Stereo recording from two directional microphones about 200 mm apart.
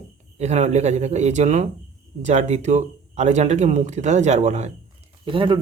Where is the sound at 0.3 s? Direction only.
35° right (ahead or behind).